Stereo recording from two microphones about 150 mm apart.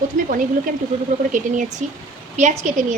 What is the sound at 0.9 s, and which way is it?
Speech, 40° right (ahead or behind).